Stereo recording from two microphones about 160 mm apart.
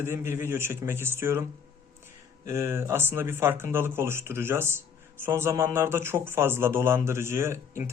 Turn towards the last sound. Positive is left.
turn(degrees=-15)  # may be behind; listen again after turning